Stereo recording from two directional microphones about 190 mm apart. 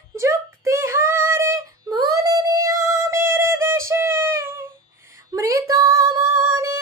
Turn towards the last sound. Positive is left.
turn(degrees=-15)  # may be behind; listen again after turning